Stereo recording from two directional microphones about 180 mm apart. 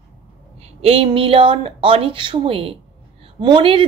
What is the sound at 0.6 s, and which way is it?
A woman's voice, 35° right (ahead or behind).